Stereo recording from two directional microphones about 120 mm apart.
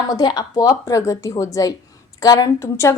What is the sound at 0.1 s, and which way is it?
A woman's voice, 35° left (ahead or behind).